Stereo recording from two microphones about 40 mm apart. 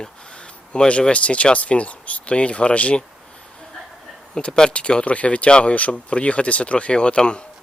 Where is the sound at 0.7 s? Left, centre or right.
Left.